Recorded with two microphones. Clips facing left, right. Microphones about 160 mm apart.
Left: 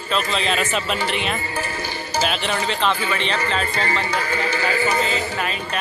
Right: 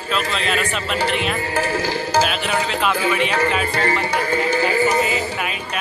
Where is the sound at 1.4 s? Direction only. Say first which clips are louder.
Right 6 dB; 90° right.